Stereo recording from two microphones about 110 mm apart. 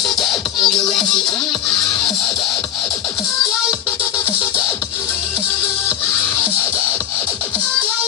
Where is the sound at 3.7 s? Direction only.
20° left (ahead or behind).